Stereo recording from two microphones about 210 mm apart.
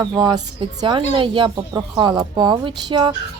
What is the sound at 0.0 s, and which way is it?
A woman's voice, 20° right (ahead or behind).